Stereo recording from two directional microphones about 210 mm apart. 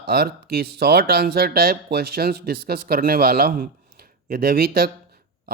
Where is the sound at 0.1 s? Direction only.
45° right (ahead or behind).